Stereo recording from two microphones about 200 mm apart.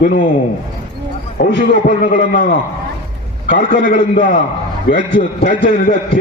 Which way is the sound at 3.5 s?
40° left (ahead or behind).